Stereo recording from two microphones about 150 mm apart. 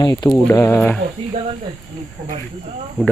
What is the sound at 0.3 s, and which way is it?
Speech, 15° left (ahead or behind).